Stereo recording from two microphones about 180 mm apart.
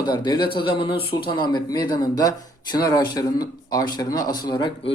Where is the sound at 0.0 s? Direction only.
25° left (ahead or behind).